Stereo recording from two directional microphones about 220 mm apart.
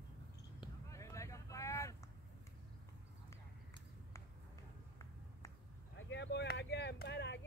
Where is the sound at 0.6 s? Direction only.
15° left (ahead or behind).